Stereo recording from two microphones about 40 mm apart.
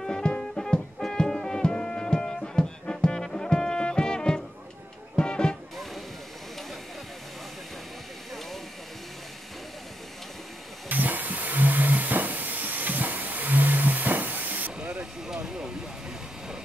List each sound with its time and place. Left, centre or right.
0.0 s music: centre
10.9 s hiss: right
14.8 s vehicle: right